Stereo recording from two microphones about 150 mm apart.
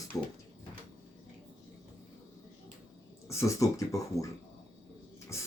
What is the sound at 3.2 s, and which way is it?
Speech, 20° left (ahead or behind).